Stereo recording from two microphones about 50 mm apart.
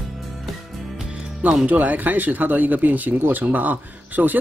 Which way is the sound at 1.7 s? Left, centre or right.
Right.